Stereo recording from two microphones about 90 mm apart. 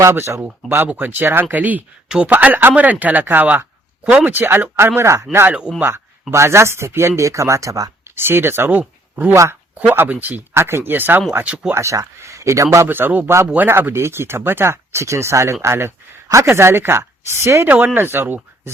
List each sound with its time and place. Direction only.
0.0 s speech: 30° right (ahead or behind)
0.9 s speech: 20° right (ahead or behind); by 7.9 s 35° right (ahead or behind)
8.1 s speech: 25° right (ahead or behind)
8.8 s a sound: 15° right (ahead or behind)
9.3 s speech: 30° right (ahead or behind)
9.9 s speech: 20° right (ahead or behind)
11.7 s speech: 35° right (ahead or behind)
12.9 s speech: 20° right (ahead or behind)